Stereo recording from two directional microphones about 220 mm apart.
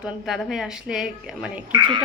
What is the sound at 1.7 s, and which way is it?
Speech, 20° right (ahead or behind).